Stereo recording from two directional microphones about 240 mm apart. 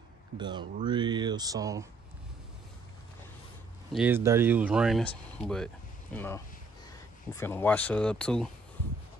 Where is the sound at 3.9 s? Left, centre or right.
Centre.